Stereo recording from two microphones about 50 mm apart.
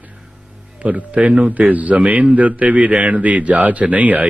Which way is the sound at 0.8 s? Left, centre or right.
Right.